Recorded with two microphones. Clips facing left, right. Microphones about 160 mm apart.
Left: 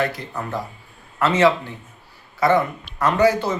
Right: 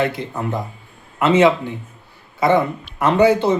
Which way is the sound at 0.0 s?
20° right (ahead or behind).